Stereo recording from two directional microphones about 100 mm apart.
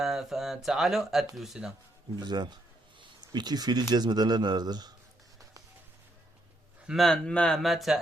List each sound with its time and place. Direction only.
0.0 s speech: 5° right (ahead or behind)
2.1 s speech: 45° right (ahead or behind)
6.8 s speech: centre (ahead or behind)